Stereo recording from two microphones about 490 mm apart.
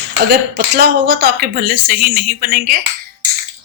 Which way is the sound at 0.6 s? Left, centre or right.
Centre.